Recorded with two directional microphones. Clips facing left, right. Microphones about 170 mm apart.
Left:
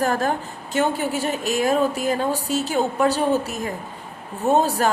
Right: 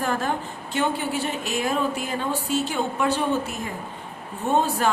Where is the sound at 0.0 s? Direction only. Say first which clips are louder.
Left 4 dB; 40° left (ahead or behind).